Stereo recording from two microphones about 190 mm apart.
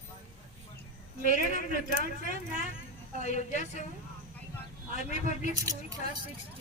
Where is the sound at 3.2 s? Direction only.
40° left (ahead or behind).